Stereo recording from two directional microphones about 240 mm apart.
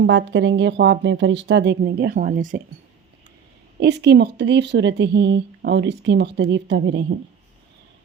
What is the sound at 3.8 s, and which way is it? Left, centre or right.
Speech, right.